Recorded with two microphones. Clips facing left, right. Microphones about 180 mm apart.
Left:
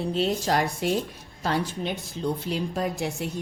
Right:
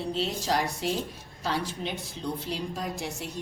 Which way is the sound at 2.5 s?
55° left (ahead or behind).